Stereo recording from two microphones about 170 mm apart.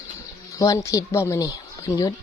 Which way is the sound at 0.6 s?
20° left (ahead or behind).